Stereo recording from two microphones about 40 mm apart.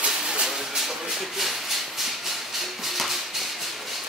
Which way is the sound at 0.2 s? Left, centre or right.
Centre.